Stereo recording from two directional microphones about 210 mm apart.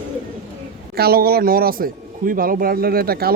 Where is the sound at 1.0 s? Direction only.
50° right (ahead or behind).